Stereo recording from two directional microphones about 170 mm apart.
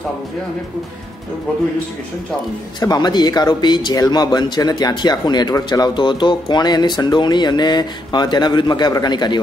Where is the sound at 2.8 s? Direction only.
25° left (ahead or behind).